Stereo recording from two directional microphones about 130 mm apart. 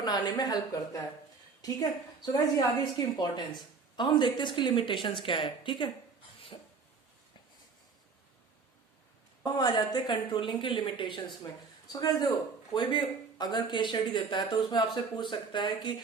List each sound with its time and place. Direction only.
0.0 s a woman's voice: 30° left (ahead or behind)
6.5 s a sound: 40° left (ahead or behind)
9.4 s a woman's voice: 30° left (ahead or behind)